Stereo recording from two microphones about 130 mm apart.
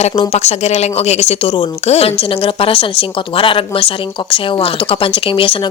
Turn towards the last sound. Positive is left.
turn(degrees=45)  # may be behind; listen again after turning